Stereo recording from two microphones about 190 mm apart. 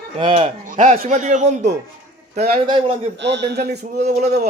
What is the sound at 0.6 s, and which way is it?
A man's voice, 40° right (ahead or behind).